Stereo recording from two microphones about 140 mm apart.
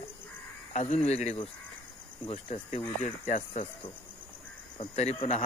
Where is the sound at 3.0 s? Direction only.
65° left (ahead or behind).